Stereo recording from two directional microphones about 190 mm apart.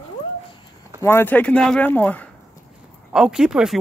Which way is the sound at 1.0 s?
10° left (ahead or behind).